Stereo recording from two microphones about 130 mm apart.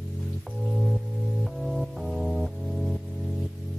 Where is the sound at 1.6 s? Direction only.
Centre (ahead or behind).